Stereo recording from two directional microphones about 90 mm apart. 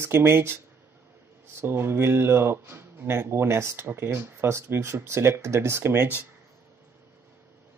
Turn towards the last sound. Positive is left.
turn(degrees=-25)  # may be behind; listen again after turning